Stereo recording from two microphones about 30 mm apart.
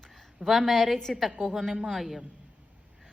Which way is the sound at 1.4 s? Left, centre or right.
Centre.